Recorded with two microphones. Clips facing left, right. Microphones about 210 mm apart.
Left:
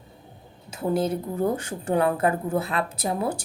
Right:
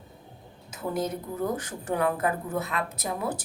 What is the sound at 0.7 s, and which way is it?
A woman's voice, 30° left (ahead or behind).